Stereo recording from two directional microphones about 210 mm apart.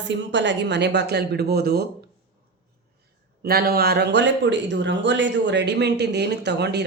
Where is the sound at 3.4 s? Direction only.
45° right (ahead or behind).